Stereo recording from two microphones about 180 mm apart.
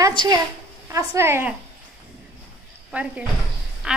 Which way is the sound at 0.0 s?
25° right (ahead or behind).